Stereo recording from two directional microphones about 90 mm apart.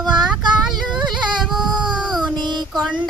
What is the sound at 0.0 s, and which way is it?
Child singing, 55° right (ahead or behind).